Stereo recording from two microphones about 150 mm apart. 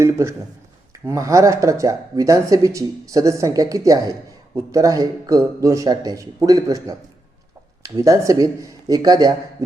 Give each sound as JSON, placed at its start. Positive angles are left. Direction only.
{"t": 0.0, "sound": "a man's voice", "side_deg": -20}